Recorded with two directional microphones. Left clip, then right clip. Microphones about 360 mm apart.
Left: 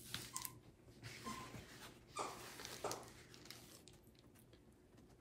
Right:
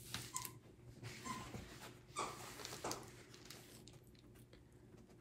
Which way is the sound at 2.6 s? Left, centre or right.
Centre.